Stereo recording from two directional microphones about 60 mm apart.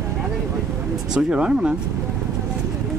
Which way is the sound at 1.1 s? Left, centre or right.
Centre.